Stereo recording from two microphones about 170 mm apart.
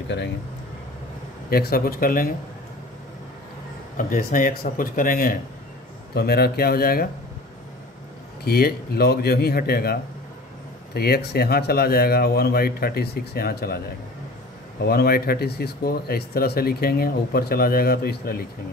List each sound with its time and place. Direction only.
1.5 s speech: 65° left (ahead or behind)
3.9 s speech: 50° left (ahead or behind)
6.1 s speech: 70° left (ahead or behind)
8.5 s speech: 65° left (ahead or behind)
14.8 s speech: 65° left (ahead or behind)